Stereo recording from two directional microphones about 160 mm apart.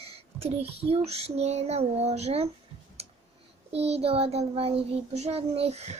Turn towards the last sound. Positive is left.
turn(degrees=-40)  # may be behind; listen again after turning